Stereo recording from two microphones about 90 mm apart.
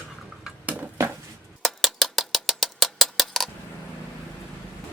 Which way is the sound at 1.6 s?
Centre (ahead or behind).